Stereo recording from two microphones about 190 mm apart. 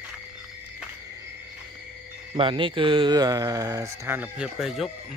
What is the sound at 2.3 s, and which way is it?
Speech, 25° right (ahead or behind).